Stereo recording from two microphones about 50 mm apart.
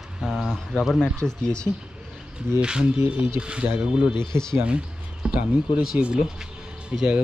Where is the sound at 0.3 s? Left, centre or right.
Centre.